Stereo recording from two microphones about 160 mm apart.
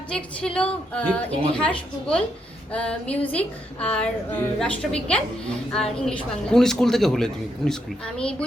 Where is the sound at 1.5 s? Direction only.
5° left (ahead or behind).